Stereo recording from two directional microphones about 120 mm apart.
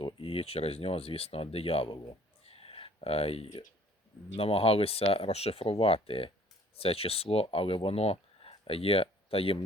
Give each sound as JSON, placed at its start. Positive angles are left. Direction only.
{"t": 0.0, "sound": "speech", "side_deg": 50}
{"t": 2.5, "sound": "a sound", "side_deg": 50}
{"t": 4.4, "sound": "speech", "side_deg": 55}